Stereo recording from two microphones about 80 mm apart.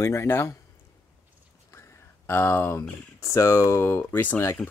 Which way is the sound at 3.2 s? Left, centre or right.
Left.